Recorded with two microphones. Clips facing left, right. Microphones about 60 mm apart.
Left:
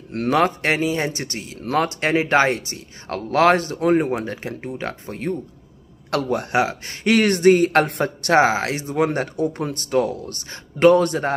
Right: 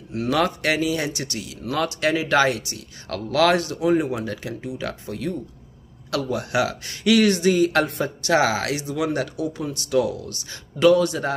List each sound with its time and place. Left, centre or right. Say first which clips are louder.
0.3 s speech: left 3 dB; left
6.0 s speech: left 3 dB; left
6.5 s speech: left 1 dB; left
8.4 s speech: left 5 dB; left